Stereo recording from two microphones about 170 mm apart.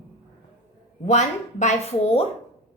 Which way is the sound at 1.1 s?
45° left (ahead or behind).